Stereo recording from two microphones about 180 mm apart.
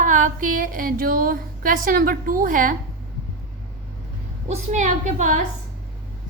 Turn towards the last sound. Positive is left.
turn(degrees=-40)  # may be behind; listen again after turning